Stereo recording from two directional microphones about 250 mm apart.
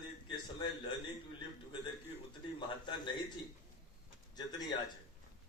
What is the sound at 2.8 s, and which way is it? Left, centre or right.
Speech, centre.